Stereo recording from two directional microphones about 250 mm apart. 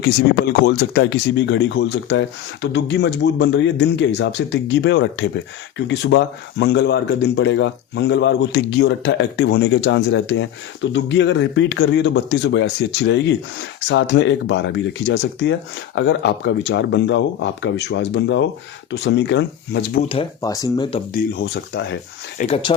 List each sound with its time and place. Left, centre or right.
0.6 s speech: left
20.1 s speech: centre
21.1 s speech: left
22.4 s speech: left